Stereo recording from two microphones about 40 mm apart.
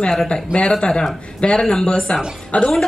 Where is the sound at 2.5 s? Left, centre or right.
Left.